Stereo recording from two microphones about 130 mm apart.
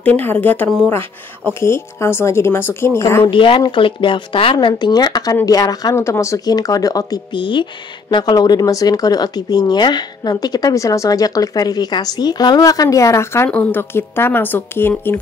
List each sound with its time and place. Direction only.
0.0 s speech: 15° left (ahead or behind)
1.5 s speech: 20° left (ahead or behind)
3.3 s speech: 40° left (ahead or behind); by 15.1 s 15° left (ahead or behind)